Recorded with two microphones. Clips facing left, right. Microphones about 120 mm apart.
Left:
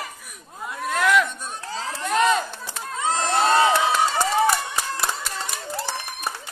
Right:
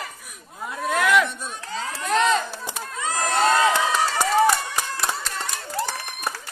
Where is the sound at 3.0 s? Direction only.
25° left (ahead or behind).